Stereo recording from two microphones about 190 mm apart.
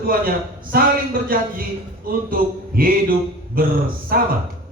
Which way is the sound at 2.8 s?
50° right (ahead or behind).